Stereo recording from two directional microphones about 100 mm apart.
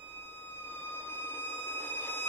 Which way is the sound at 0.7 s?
20° left (ahead or behind).